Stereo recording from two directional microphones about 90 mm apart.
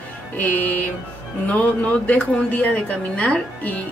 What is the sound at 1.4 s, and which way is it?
Speech, 15° left (ahead or behind).